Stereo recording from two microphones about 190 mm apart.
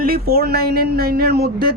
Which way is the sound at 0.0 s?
55° right (ahead or behind).